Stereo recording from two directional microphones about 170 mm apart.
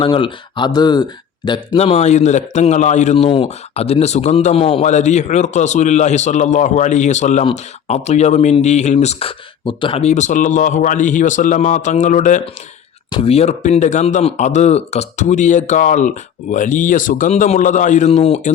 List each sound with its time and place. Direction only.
0.0 s speech: 30° left (ahead or behind)
1.7 s speech: 40° left (ahead or behind)
3.2 s speech: 35° left (ahead or behind)
13.1 s speech: 30° left (ahead or behind)